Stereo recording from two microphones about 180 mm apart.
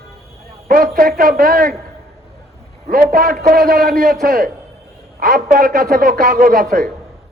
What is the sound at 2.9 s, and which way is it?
A man's voice, 50° right (ahead or behind).